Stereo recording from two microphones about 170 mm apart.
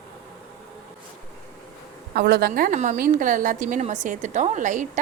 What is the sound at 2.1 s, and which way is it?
A woman's voice, 70° right (ahead or behind).